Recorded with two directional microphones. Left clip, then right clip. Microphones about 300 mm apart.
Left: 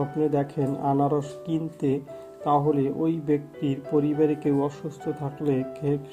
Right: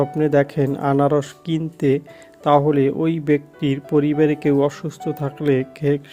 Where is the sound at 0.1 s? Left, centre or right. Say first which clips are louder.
Right 8 dB; right.